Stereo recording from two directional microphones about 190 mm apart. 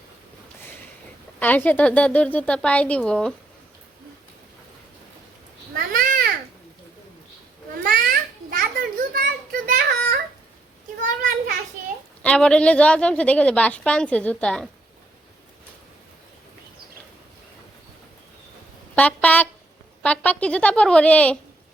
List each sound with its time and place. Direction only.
1.4 s speech: 10° left (ahead or behind)
5.7 s babbling: 45° right (ahead or behind)
7.8 s children playing: 50° right (ahead or behind)
12.2 s a woman's voice: 5° left (ahead or behind)
18.9 s speech: 5° left (ahead or behind)